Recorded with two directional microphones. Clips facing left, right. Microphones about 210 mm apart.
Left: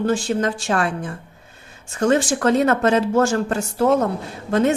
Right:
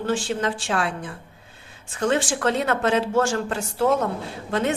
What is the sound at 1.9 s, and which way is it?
A woman's voice, 45° left (ahead or behind).